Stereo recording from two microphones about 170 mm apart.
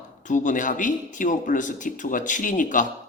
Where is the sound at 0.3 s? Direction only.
50° left (ahead or behind).